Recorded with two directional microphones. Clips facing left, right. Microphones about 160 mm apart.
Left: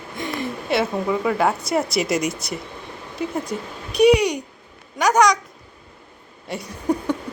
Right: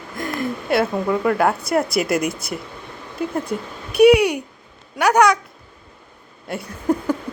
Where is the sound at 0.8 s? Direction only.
Centre (ahead or behind).